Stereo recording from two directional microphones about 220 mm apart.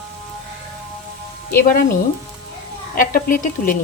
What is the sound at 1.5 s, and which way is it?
Speech, 40° left (ahead or behind).